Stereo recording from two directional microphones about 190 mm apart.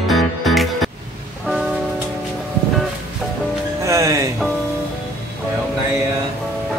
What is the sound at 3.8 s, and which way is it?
Music, 15° right (ahead or behind).